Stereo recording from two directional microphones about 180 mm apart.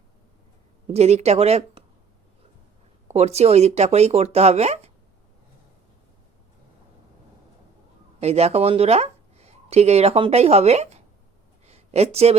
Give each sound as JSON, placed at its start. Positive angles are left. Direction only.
{"t": 0.9, "sound": "speech", "side_deg": -35}
{"t": 3.1, "sound": "speech", "side_deg": -35}
{"t": 8.2, "sound": "speech", "side_deg": -35}
{"t": 11.6, "sound": "a sound", "side_deg": -35}